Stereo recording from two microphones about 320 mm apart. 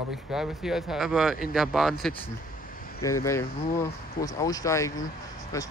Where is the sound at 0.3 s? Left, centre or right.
Centre.